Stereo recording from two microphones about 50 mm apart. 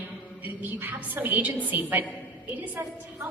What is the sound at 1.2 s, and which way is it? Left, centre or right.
Speech, right.